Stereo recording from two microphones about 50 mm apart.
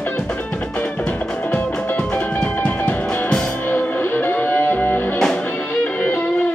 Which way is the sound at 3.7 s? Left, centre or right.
Left.